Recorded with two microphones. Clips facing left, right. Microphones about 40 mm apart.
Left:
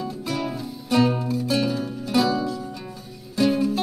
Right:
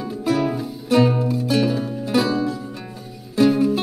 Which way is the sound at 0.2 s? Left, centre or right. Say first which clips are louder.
Right 11 dB; centre.